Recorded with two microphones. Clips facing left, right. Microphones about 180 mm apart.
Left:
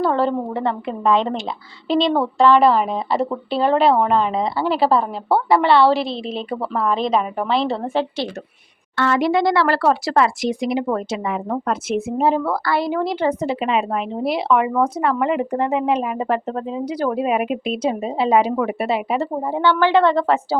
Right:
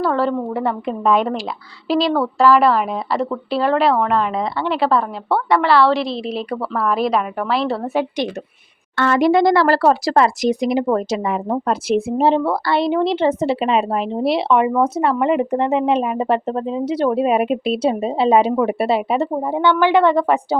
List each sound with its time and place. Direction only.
0.0 s a woman's voice: centre (ahead or behind)
9.0 s speech: 50° right (ahead or behind); by 20.6 s 15° right (ahead or behind)